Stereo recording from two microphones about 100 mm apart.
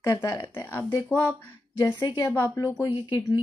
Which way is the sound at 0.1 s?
40° left (ahead or behind).